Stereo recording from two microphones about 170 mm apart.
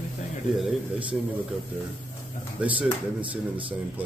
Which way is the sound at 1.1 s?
5° right (ahead or behind).